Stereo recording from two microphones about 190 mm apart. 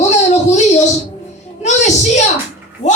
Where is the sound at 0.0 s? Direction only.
40° left (ahead or behind).